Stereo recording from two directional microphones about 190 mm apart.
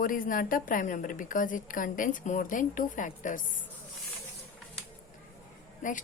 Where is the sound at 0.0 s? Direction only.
45° left (ahead or behind).